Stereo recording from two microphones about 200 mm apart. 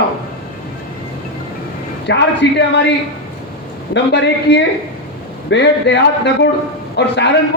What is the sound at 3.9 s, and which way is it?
Speech, 60° left (ahead or behind).